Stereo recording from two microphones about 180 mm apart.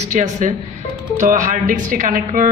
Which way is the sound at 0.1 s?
45° right (ahead or behind).